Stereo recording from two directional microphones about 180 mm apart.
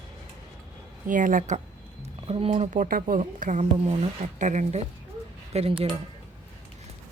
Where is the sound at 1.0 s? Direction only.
45° right (ahead or behind).